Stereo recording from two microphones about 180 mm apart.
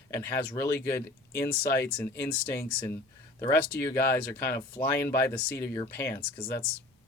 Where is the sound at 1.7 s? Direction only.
10° left (ahead or behind).